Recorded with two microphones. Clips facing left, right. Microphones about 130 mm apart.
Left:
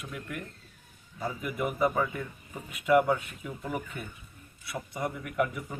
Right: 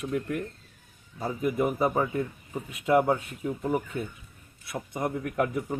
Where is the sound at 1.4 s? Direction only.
30° right (ahead or behind).